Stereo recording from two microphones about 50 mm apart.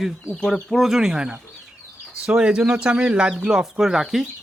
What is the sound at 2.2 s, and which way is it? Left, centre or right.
Speech, centre.